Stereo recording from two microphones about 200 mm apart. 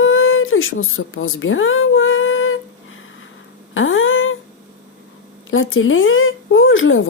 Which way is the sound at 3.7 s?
75° left (ahead or behind).